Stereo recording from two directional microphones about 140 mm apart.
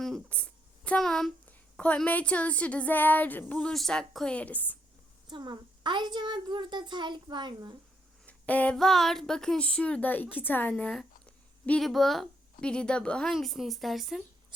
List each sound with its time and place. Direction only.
0.0 s a sound: 5° left (ahead or behind)
0.9 s a woman's voice: 5° left (ahead or behind)
5.3 s a child's voice: 35° right (ahead or behind)
8.3 s a woman's voice: 10° left (ahead or behind)